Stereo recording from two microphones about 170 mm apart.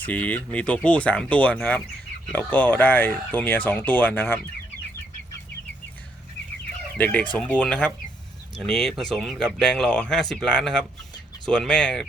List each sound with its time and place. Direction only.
0.0 s speech: 10° left (ahead or behind)
6.9 s speech: 10° left (ahead or behind)